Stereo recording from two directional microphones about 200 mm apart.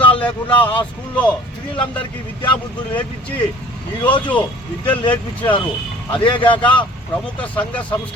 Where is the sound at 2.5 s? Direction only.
10° left (ahead or behind).